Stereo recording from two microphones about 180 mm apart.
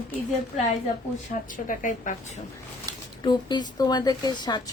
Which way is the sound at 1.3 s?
50° left (ahead or behind).